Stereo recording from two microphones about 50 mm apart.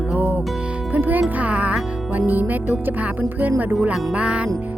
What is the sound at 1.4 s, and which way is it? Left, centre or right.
Music, right.